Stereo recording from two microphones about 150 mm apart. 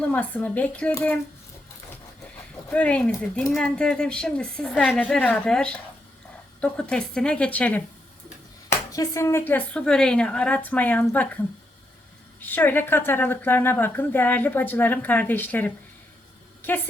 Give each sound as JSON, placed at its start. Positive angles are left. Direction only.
{"t": 0.0, "sound": "a woman's voice", "side_deg": 10}
{"t": 2.6, "sound": "a woman's voice", "side_deg": 10}
{"t": 8.9, "sound": "a woman's voice", "side_deg": 20}
{"t": 12.4, "sound": "a woman's voice", "side_deg": 10}